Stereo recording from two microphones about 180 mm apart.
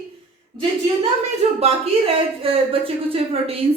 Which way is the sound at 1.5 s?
35° right (ahead or behind).